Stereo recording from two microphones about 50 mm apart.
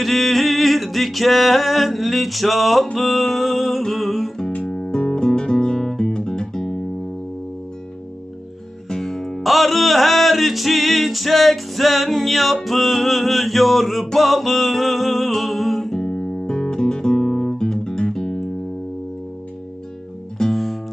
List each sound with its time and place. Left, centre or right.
0.0 s singing: centre
4.6 s music: centre
8.9 s music: centre
20.4 s music: centre